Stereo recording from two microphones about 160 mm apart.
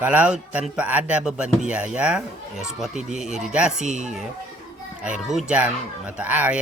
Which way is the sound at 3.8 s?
50° right (ahead or behind).